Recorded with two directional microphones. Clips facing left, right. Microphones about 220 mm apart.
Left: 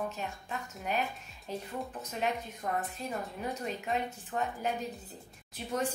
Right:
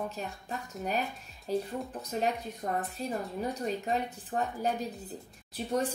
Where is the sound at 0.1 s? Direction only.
35° right (ahead or behind).